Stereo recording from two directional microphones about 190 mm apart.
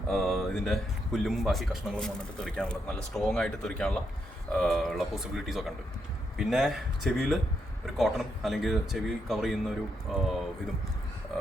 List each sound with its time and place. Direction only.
0.1 s speech: centre (ahead or behind)